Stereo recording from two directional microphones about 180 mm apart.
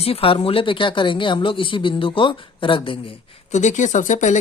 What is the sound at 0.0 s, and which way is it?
Speech, 30° left (ahead or behind).